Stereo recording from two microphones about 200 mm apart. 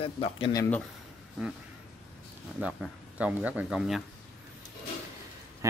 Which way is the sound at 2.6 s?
5° right (ahead or behind).